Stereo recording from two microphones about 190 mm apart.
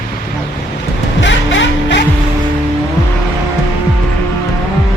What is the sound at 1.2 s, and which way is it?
Music, 75° left (ahead or behind).